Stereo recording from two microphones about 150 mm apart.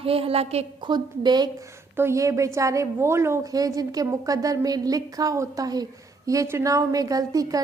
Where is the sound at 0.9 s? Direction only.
30° right (ahead or behind).